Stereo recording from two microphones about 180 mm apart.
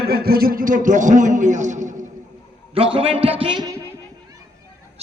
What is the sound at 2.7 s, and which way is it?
A man's voice, 30° right (ahead or behind).